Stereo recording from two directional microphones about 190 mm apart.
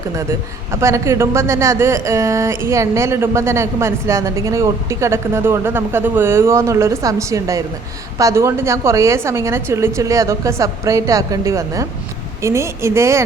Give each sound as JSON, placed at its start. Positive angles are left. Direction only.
{"t": 0.2, "sound": "a man's voice", "side_deg": -15}